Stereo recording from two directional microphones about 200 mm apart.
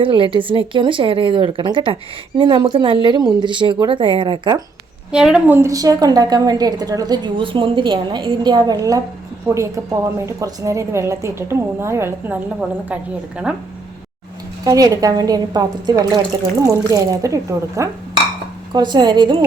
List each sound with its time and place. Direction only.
0.0 s a woman's voice: 25° right (ahead or behind)
5.1 s a woman's voice: 5° right (ahead or behind)
14.6 s a woman's voice: 20° right (ahead or behind)